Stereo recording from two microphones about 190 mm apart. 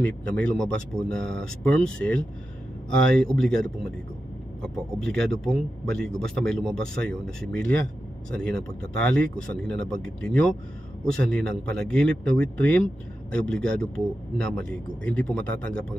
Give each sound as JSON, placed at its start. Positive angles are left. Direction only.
{"t": 0.0, "sound": "a man's voice", "side_deg": 5}